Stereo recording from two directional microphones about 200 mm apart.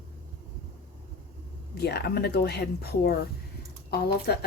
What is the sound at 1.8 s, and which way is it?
Speech, 55° left (ahead or behind).